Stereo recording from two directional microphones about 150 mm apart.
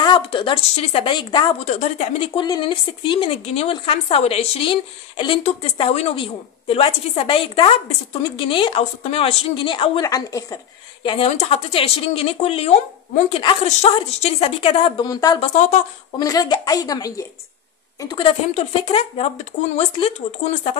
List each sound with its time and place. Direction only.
0.0 s a woman's voice: 35° left (ahead or behind)
1.6 s speech: 50° left (ahead or behind)
2.1 s a woman's voice: 30° left (ahead or behind)
11.1 s a woman's voice: 40° left (ahead or behind)
13.3 s a woman's voice: 30° left (ahead or behind)
13.7 s speech: 50° left (ahead or behind)
13.9 s a woman's voice: 40° left (ahead or behind)
15.4 s speech: 50° left (ahead or behind)
16.2 s a woman's voice: 25° left (ahead or behind); by 20.7 s 50° left (ahead or behind)